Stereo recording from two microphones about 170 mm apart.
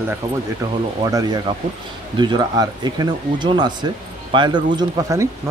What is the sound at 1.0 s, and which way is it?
Speech, 20° right (ahead or behind).